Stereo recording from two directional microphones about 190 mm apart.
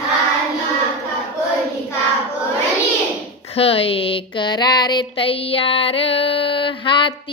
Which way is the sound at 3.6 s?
30° left (ahead or behind).